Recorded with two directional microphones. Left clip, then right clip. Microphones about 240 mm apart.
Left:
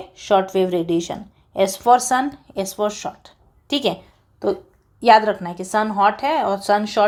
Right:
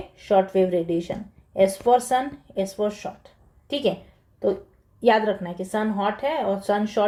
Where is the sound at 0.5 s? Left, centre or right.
Centre.